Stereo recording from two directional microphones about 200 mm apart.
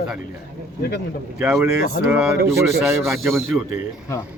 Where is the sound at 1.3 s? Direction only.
5° right (ahead or behind).